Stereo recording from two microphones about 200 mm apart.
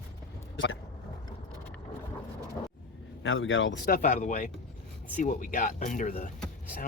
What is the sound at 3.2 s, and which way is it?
Speech, 80° left.